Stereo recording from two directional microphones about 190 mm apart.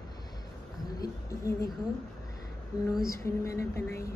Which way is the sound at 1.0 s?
15° left (ahead or behind).